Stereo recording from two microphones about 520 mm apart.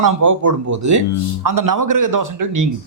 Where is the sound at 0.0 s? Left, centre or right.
Right.